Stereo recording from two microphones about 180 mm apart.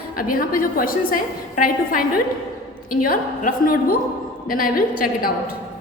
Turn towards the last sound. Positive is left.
turn(degrees=50)  # may be behind; listen again after turning